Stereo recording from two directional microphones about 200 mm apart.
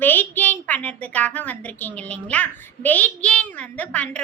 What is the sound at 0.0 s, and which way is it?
A woman's voice, 10° left (ahead or behind).